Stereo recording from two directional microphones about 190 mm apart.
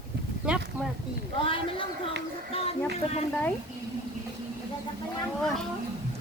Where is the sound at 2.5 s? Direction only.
30° left (ahead or behind).